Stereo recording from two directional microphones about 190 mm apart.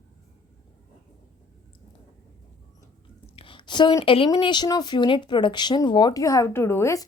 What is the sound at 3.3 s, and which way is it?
A woman's voice, 25° left (ahead or behind).